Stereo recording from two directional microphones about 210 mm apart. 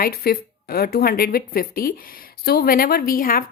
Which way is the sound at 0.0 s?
45° left (ahead or behind).